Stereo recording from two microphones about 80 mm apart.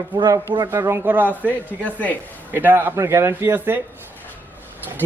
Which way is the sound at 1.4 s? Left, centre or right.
Left.